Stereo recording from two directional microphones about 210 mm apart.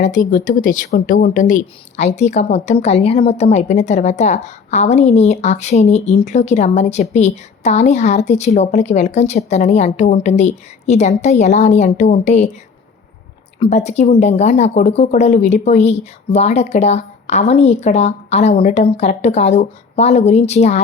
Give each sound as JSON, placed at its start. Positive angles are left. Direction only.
{"t": 0.0, "sound": "speech", "side_deg": 35}
{"t": 13.6, "sound": "speech", "side_deg": 35}